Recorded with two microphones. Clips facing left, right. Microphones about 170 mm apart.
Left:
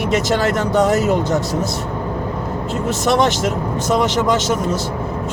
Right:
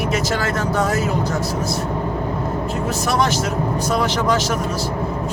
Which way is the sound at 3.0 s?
20° left (ahead or behind).